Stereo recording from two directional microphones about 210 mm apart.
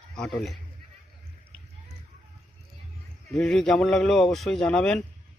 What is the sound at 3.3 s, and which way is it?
Speech, centre (ahead or behind).